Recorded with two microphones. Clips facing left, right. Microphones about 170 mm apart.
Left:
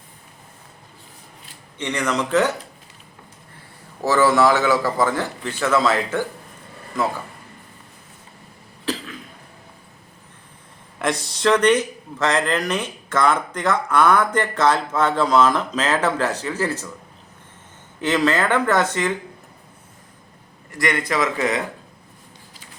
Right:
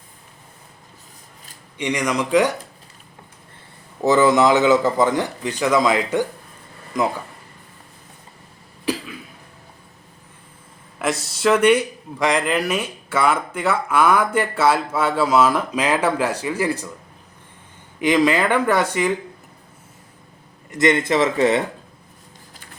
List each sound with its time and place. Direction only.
1.8 s a man's voice: 10° right (ahead or behind)
4.0 s a man's voice: 20° right (ahead or behind)
8.8 s cough: 10° right (ahead or behind)
11.0 s a man's voice: 5° right (ahead or behind)
18.0 s a man's voice: 15° right (ahead or behind)
20.7 s a man's voice: 20° right (ahead or behind)